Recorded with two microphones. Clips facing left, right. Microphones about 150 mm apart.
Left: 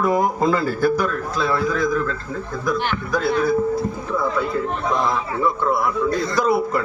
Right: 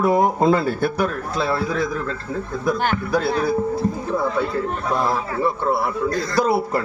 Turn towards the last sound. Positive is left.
turn(degrees=-30)  # may be behind; listen again after turning